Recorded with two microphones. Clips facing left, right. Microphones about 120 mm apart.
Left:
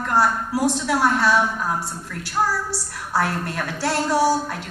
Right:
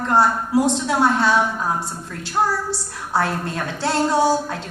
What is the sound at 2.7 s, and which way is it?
A woman's voice, 25° right (ahead or behind).